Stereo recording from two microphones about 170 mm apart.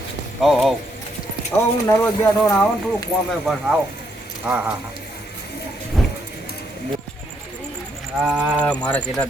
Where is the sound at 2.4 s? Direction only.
10° left (ahead or behind).